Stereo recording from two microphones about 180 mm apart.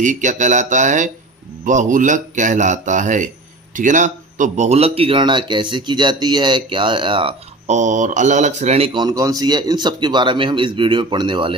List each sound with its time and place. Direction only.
0.0 s speech: 45° right (ahead or behind); by 11.5 s 25° right (ahead or behind)